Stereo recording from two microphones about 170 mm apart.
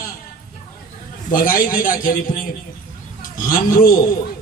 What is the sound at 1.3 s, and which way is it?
A man's voice, 55° left (ahead or behind).